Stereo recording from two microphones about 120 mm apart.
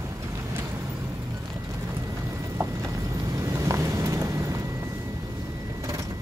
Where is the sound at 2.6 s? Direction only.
25° right (ahead or behind).